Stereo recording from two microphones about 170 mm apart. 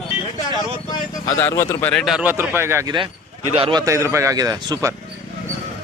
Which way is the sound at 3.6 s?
30° right (ahead or behind).